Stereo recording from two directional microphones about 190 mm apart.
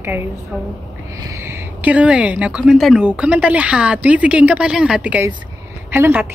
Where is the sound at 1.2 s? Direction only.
15° right (ahead or behind).